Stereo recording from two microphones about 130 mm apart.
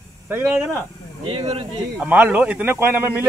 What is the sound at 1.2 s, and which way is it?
Speech, 50° right (ahead or behind).